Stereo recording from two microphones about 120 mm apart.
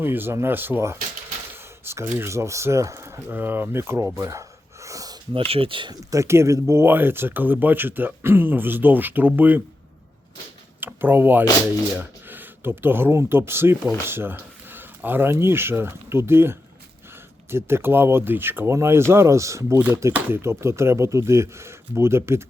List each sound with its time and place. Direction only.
0.0 s speech: 15° right (ahead or behind)
1.5 s a sound: 20° right (ahead or behind)
2.1 s speech: 20° right (ahead or behind)
4.2 s a sound: 25° right (ahead or behind)
5.3 s speech: 50° right (ahead or behind)
6.0 s speech: 25° right (ahead or behind)
10.8 s speech: 15° right (ahead or behind)